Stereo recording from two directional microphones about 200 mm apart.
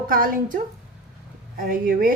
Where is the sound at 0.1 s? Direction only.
45° right (ahead or behind).